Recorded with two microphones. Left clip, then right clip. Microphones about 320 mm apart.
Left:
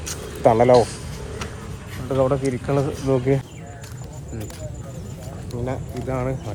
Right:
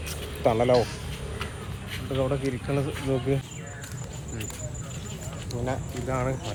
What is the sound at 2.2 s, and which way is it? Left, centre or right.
Speech, left.